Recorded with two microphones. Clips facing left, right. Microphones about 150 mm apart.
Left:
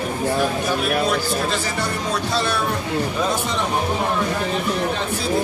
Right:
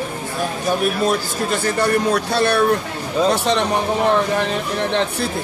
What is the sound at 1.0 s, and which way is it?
Speech, 55° right (ahead or behind).